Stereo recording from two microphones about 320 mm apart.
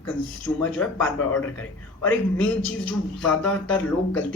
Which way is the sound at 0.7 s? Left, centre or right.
Centre.